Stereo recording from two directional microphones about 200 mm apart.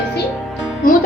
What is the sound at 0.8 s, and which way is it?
Speech, 45° left (ahead or behind).